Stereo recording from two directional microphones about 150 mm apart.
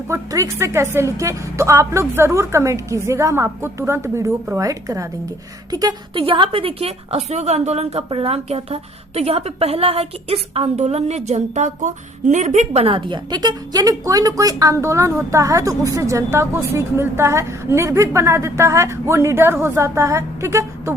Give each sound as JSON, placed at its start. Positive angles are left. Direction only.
{"t": 0.1, "sound": "a woman's voice", "side_deg": -20}